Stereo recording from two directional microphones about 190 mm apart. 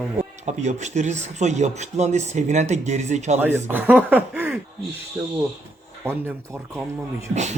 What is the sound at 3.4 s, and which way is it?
Speech, 10° right (ahead or behind).